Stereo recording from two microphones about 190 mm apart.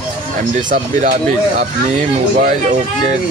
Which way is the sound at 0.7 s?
40° right (ahead or behind).